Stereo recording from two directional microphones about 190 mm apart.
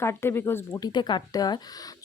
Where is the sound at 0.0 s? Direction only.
15° left (ahead or behind).